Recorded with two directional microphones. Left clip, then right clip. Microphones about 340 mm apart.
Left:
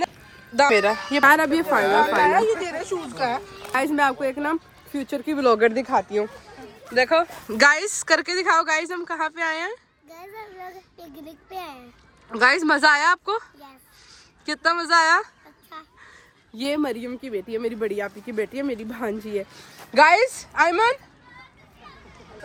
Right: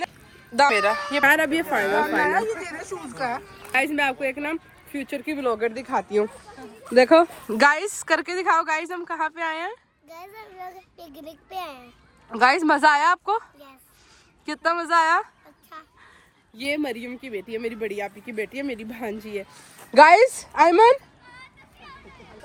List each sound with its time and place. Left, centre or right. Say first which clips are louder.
0.5 s speech: left 1 dB; centre
1.3 s speech: left 4 dB; left
2.2 s speech: left 4 dB; centre
5.5 s speech: left 7 dB; left
5.9 s speech: left 1 dB; centre
6.9 s speech: right 4 dB; centre
16.6 s speech: left 2 dB; centre
19.9 s speech: right 3 dB; centre